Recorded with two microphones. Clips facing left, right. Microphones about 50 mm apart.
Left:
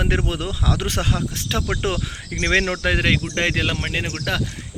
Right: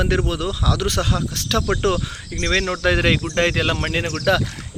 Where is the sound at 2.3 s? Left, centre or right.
Left.